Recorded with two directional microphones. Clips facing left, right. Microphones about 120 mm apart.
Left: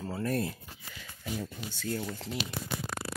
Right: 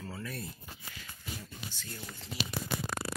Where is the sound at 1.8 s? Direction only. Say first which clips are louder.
Left 11 dB; 90° left.